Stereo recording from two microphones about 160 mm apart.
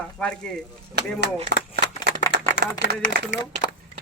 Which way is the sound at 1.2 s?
90° right.